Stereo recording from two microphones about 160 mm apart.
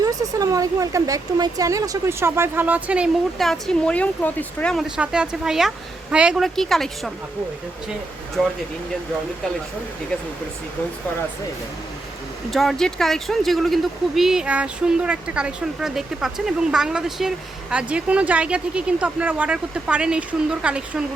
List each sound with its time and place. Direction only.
0.0 s speech: 20° right (ahead or behind); by 4.9 s 5° left (ahead or behind)
4.9 s a woman's voice: 5° right (ahead or behind)
8.4 s a woman's voice: centre (ahead or behind)
12.5 s a woman's voice: centre (ahead or behind)